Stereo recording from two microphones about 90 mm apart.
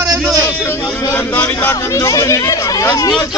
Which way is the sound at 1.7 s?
35° left (ahead or behind).